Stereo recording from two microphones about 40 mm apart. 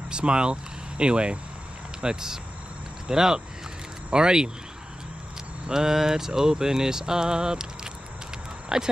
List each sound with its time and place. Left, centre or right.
0.1 s speech: right
5.7 s speech: centre